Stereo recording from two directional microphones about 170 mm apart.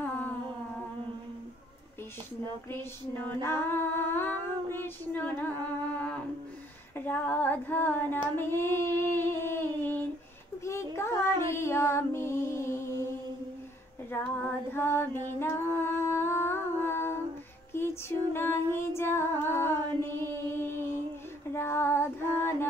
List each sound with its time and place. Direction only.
2.8 s female singing: 15° left (ahead or behind)
5.9 s music: 5° left (ahead or behind)
7.1 s child singing: 10° left (ahead or behind)
10.6 s a sound: 15° left (ahead or behind)
11.0 s child singing: 15° left (ahead or behind)
14.1 s female singing: 15° left (ahead or behind)